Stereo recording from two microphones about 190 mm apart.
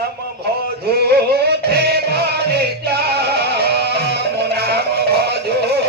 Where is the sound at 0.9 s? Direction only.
55° right (ahead or behind).